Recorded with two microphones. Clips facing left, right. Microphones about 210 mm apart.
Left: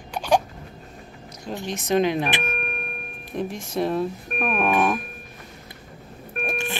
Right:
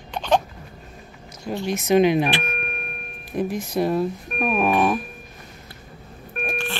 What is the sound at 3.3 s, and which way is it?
Speech, centre (ahead or behind).